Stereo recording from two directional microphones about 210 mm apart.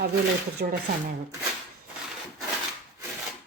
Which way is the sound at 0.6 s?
45° right (ahead or behind).